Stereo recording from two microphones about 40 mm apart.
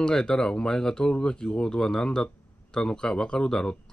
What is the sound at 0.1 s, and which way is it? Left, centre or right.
Speech, centre.